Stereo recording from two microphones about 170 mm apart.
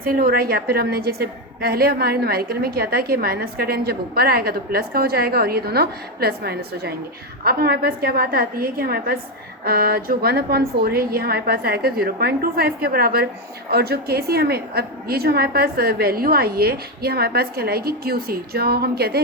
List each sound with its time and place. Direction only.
0.0 s a woman's voice: 60° right (ahead or behind)